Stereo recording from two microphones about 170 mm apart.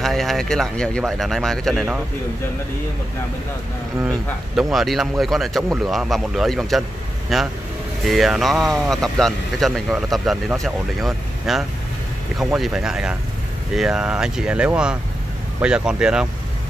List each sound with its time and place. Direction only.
0.0 s speech: centre (ahead or behind)
4.1 s speech: centre (ahead or behind)